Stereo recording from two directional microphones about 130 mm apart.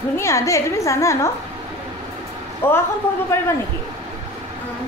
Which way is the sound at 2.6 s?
15° left (ahead or behind).